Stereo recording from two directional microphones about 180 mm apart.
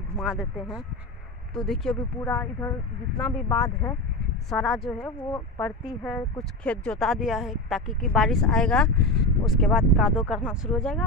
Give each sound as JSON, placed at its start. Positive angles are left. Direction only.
{"t": 0.2, "sound": "speech", "side_deg": -5}
{"t": 2.2, "sound": "speech", "side_deg": 15}
{"t": 4.5, "sound": "speech", "side_deg": 0}
{"t": 5.3, "sound": "speech", "side_deg": 15}
{"t": 6.0, "sound": "speech", "side_deg": 0}